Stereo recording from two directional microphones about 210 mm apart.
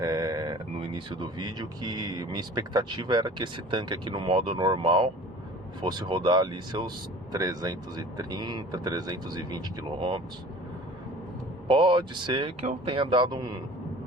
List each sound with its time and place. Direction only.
0.0 s speech: 15° right (ahead or behind)
11.7 s speech: 25° right (ahead or behind)